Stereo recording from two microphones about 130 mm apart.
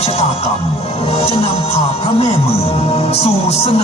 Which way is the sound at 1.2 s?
50° left (ahead or behind).